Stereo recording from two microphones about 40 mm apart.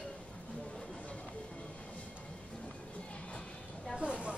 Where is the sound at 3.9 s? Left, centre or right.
Right.